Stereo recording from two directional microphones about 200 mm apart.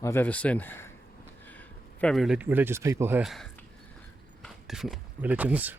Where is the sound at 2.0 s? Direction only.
Centre (ahead or behind).